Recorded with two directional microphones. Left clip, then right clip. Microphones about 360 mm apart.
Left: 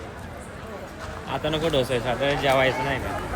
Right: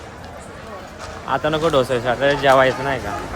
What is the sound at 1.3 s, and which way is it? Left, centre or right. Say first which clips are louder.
Speech: right 7 dB; centre.